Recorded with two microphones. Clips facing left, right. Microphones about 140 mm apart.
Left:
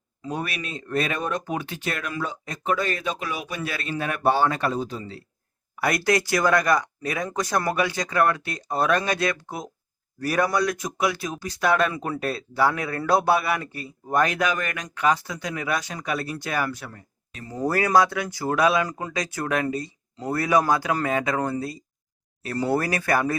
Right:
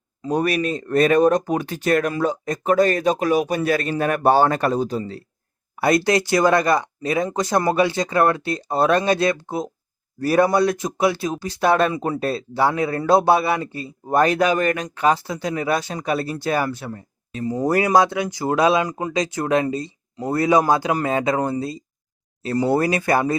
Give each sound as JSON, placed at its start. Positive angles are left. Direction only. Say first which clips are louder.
{"t": 0.2, "sound": "speech", "louder": "right 10 dB", "side_deg": -40}
{"t": 5.7, "sound": "speech", "louder": "right 5 dB", "side_deg": -25}
{"t": 17.4, "sound": "speech", "louder": "right 5 dB", "side_deg": -15}